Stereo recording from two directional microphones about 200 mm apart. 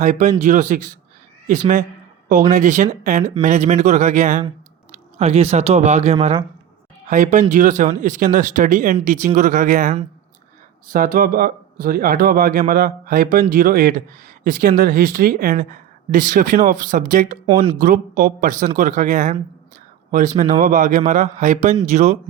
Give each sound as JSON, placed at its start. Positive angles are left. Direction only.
{"t": 0.0, "sound": "speech", "side_deg": -35}
{"t": 7.1, "sound": "a woman's voice", "side_deg": -40}
{"t": 17.4, "sound": "speech", "side_deg": -25}
{"t": 17.7, "sound": "speech", "side_deg": -45}